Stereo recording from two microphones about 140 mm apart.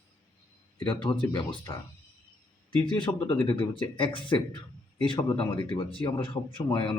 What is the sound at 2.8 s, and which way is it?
A man's voice, 35° left (ahead or behind).